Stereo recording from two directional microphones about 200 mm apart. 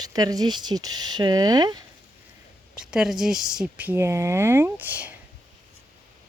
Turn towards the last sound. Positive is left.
turn(degrees=-10)  # may be behind; listen again after turning